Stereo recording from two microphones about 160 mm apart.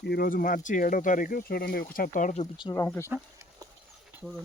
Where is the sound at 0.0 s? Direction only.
80° left; by 2.5 s 50° left (ahead or behind).